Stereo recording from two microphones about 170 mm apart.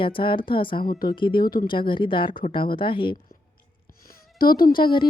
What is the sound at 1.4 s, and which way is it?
Speech, 60° left (ahead or behind).